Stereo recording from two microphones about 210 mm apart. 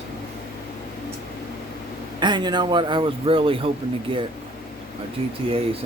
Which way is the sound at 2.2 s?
20° right (ahead or behind).